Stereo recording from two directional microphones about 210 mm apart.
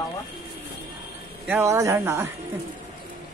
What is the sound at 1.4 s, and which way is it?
Speech, 10° right (ahead or behind).